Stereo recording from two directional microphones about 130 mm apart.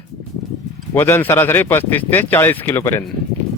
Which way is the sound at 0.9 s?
15° left (ahead or behind).